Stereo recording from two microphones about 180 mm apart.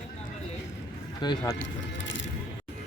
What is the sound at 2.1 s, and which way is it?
Coin, 90° left.